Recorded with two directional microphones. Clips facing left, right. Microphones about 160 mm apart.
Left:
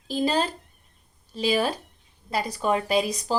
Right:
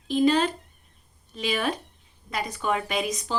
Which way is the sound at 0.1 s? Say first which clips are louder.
Right 3 dB; 35° left (ahead or behind).